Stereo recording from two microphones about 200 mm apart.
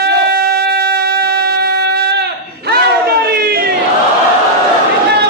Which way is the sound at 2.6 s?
50° right (ahead or behind).